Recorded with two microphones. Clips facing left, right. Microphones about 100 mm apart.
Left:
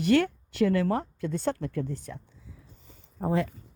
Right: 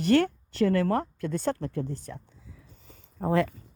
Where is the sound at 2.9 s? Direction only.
70° right (ahead or behind).